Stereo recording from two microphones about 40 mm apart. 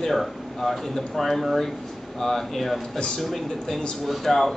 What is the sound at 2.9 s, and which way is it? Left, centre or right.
Speech, centre.